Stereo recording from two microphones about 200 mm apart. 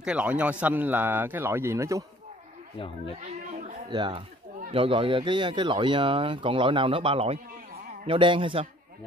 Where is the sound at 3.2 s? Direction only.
35° right (ahead or behind).